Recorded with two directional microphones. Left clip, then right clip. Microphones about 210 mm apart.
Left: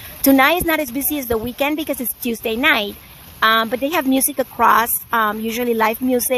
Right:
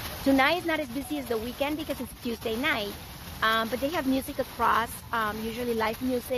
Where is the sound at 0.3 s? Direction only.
40° left (ahead or behind).